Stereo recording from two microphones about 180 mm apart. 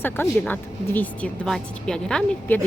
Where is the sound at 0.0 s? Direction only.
10° left (ahead or behind).